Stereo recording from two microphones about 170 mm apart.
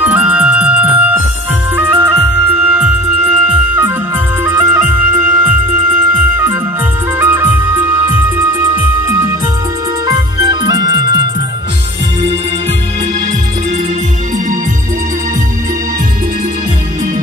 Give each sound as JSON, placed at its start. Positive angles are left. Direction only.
{"t": 0.0, "sound": "music", "side_deg": -10}
{"t": 10.0, "sound": "music", "side_deg": -25}